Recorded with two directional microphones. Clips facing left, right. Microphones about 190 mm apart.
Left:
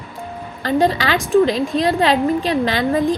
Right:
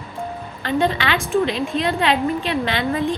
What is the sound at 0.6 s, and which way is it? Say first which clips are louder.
Speech: left 3 dB; 40° left (ahead or behind).